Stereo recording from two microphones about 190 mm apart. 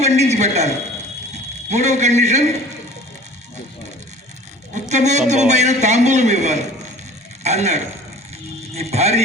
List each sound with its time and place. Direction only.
0.0 s a man's voice: 35° right (ahead or behind)
1.7 s a man's voice: 35° right (ahead or behind)
4.7 s a man's voice: 40° right (ahead or behind)